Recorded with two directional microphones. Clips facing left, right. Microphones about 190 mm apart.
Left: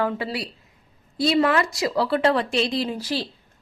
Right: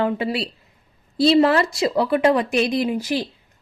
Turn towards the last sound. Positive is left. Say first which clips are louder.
# right 4 dB
turn(degrees=-15)  # may be behind; listen again after turning